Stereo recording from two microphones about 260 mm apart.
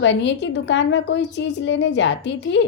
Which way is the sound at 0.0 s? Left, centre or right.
Left.